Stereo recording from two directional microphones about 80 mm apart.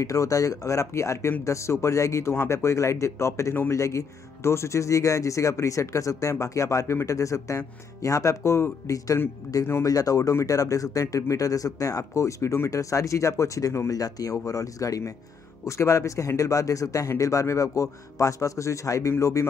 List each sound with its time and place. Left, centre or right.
0.0 s speech: left